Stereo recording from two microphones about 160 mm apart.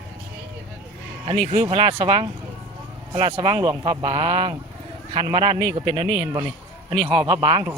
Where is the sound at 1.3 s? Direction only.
45° right (ahead or behind).